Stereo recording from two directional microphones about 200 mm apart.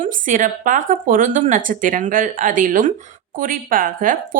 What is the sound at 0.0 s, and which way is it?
A woman's voice, 40° right (ahead or behind).